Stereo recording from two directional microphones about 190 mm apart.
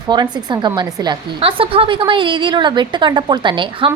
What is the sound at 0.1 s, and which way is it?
A woman's voice, 25° right (ahead or behind).